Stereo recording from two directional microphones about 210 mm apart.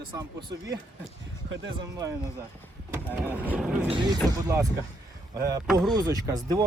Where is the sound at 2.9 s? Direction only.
5° right (ahead or behind).